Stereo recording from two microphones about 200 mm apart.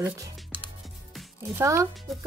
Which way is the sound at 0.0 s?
10° right (ahead or behind).